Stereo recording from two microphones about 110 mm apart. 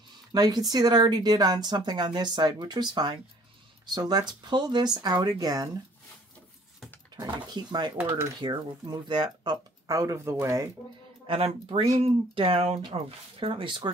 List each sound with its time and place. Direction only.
0.3 s speech: 40° right (ahead or behind)
7.2 s speech: 40° right (ahead or behind)
8.0 s coin: 20° right (ahead or behind)
8.4 s speech: 40° right (ahead or behind)
9.8 s speech: 30° right (ahead or behind)
11.2 s speech: 65° right (ahead or behind)
12.8 s speech: 55° right (ahead or behind)